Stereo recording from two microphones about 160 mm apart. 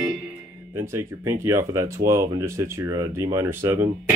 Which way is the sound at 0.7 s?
15° right (ahead or behind).